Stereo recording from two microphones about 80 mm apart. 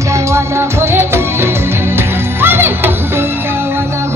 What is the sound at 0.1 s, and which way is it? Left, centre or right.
Music, right.